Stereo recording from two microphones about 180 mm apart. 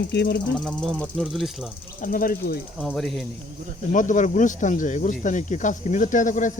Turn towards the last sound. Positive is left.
turn(degrees=45)  # may be behind; listen again after turning